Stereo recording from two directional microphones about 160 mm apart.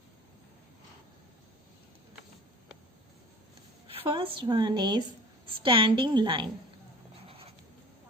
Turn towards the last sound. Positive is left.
turn(degrees=-30)  # may be behind; listen again after turning